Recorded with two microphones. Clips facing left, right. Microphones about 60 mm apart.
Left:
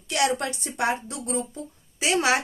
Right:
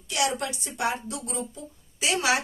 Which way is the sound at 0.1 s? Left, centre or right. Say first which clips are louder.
Left 3 dB; left.